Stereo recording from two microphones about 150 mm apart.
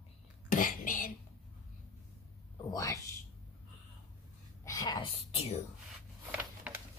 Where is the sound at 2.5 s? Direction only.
25° left (ahead or behind).